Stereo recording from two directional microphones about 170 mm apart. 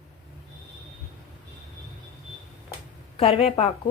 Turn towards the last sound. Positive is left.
turn(degrees=35)  # may be behind; listen again after turning